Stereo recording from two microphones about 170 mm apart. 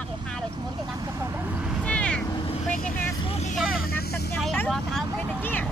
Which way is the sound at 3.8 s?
60° left (ahead or behind).